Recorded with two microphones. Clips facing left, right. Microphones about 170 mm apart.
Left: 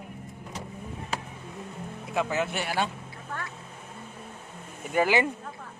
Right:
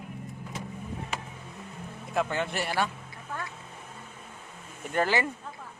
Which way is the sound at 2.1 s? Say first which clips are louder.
Left 1 dB; 5° left (ahead or behind).